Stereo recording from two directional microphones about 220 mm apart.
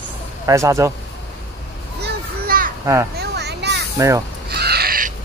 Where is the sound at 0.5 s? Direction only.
15° right (ahead or behind).